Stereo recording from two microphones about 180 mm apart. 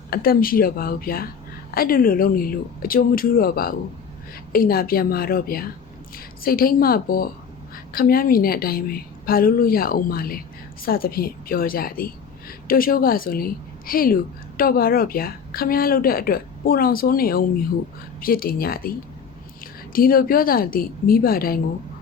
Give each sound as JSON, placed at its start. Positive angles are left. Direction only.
{"t": 0.1, "sound": "a woman's voice", "side_deg": 55}